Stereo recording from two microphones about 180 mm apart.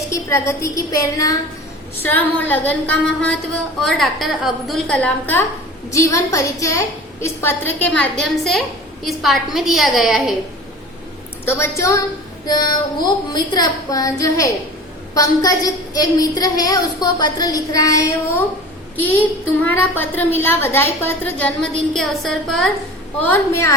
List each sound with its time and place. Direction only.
0.1 s a woman's voice: 15° left (ahead or behind); by 10.3 s centre (ahead or behind)
11.4 s a woman's voice: 15° left (ahead or behind)
19.6 s a woman's voice: 10° left (ahead or behind)
23.2 s a woman's voice: 15° left (ahead or behind)